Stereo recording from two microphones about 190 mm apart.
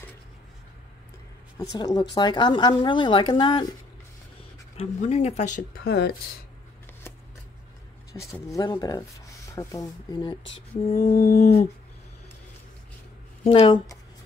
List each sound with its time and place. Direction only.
1.6 s speech: 20° left (ahead or behind)
4.7 s speech: 35° left (ahead or behind); by 6.1 s 60° left (ahead or behind)
8.1 s speech: 15° left (ahead or behind)
10.8 s speech: 30° left (ahead or behind)
11.1 s a sound: 50° left (ahead or behind)
13.4 s speech: 30° left (ahead or behind)